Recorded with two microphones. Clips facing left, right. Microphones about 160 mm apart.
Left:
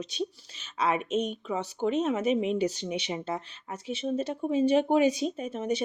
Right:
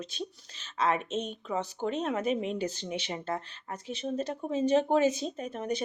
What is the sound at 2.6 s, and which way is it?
Speech, 10° left (ahead or behind).